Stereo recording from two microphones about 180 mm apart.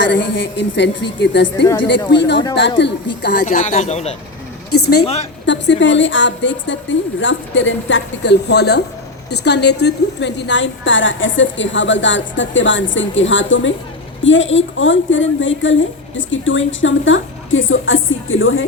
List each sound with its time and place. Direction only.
0.0 s a woman's voice: 85° left
1.2 s a woman's voice: 80° left
3.4 s speech: 40° left (ahead or behind)
4.7 s a woman's voice: 65° left (ahead or behind)
5.5 s a woman's voice: 90° left